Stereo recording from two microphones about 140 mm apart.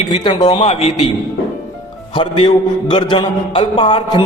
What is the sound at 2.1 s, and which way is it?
A man's voice, 35° left (ahead or behind).